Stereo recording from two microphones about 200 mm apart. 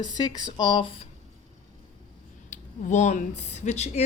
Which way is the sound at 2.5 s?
40° left (ahead or behind).